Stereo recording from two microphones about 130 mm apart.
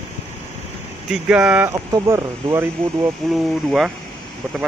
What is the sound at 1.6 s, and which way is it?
Speech, 25° right (ahead or behind).